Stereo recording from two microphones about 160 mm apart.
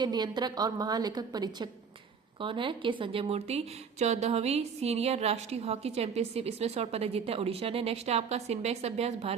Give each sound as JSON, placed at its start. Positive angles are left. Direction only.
{"t": 0.0, "sound": "a woman's voice", "side_deg": -25}